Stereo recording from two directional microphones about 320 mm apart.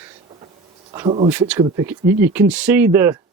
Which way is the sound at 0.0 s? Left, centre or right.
Centre.